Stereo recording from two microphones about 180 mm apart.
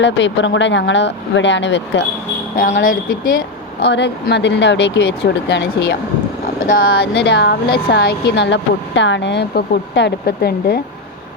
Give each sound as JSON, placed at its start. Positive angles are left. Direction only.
{"t": 0.0, "sound": "speech", "side_deg": 85}
{"t": 2.8, "sound": "speech", "side_deg": 50}
{"t": 3.8, "sound": "speech", "side_deg": 70}
{"t": 6.7, "sound": "speech", "side_deg": 55}